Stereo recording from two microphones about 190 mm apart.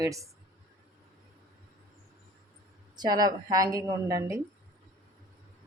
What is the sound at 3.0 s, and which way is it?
A woman's voice, 20° right (ahead or behind).